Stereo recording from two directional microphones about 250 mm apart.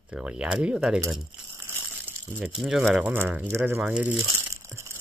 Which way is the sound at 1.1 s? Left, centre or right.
Centre.